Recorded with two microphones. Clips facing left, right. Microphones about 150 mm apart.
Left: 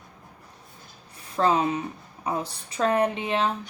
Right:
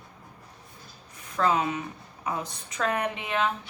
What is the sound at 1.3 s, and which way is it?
A woman's voice, 30° left (ahead or behind).